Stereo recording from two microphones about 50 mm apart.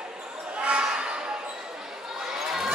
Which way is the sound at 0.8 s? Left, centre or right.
Centre.